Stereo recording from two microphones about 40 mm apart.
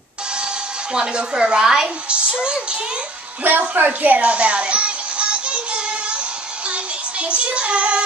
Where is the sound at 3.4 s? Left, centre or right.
Right.